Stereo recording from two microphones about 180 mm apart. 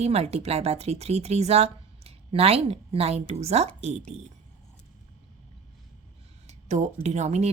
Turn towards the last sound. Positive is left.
turn(degrees=-40)  # may be behind; listen again after turning